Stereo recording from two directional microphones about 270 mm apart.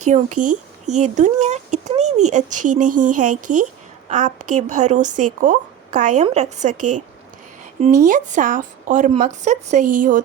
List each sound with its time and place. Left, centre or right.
0.0 s speech: right
6.7 s speech: right
8.0 s speech: right